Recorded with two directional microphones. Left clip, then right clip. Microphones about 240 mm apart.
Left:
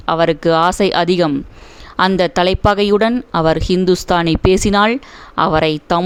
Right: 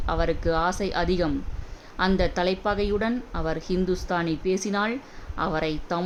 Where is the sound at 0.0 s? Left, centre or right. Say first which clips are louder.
Left 12 dB; left.